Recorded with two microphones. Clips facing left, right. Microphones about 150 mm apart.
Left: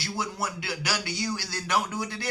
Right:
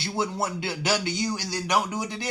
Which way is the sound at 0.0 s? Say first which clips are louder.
Right 4 dB; 25° right (ahead or behind).